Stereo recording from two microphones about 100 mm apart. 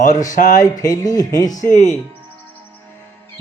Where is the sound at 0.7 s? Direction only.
35° left (ahead or behind).